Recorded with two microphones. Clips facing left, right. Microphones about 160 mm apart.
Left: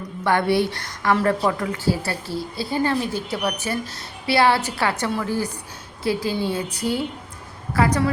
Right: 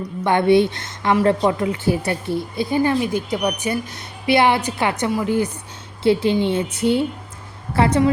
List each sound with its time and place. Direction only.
0.3 s speech: 20° right (ahead or behind)